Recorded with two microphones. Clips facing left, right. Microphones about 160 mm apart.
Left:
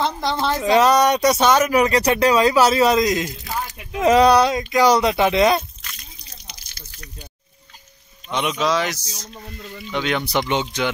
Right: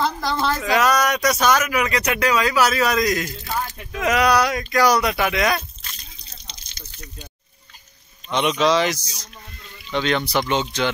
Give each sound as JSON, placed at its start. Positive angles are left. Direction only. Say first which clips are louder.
{"t": 0.0, "sound": "speech", "louder": "left 1 dB", "side_deg": 25}
{"t": 6.1, "sound": "drip", "louder": "left 1 dB", "side_deg": -20}
{"t": 8.3, "sound": "speech", "louder": "right 2 dB", "side_deg": 5}